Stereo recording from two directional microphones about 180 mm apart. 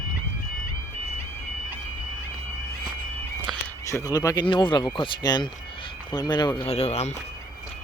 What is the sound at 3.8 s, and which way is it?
Speech, 15° left (ahead or behind).